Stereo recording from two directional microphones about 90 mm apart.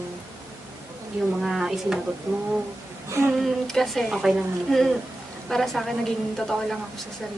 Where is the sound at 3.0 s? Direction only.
30° right (ahead or behind).